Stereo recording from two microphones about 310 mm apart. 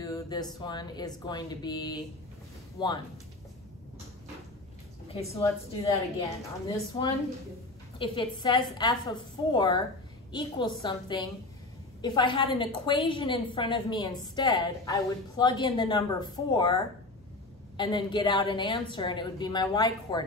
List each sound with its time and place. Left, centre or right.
0.0 s a sound: centre
0.6 s a woman's voice: centre
5.0 s a woman's voice: centre